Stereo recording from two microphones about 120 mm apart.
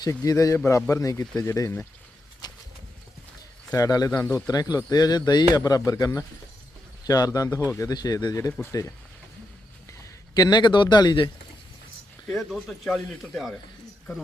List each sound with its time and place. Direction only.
0.3 s speech: 30° left (ahead or behind)
2.4 s a sound: 35° left (ahead or behind)
3.8 s speech: 30° left (ahead or behind)
10.3 s speech: 35° left (ahead or behind)
12.3 s speech: centre (ahead or behind)